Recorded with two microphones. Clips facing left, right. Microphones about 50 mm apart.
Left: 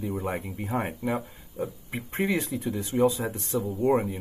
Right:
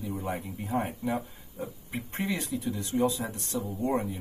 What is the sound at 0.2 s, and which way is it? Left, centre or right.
Speech, left.